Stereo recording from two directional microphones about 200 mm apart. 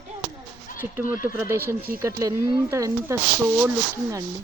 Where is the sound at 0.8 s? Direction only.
30° left (ahead or behind).